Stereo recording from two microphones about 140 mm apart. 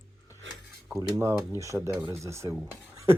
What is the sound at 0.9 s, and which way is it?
Speech, 20° right (ahead or behind).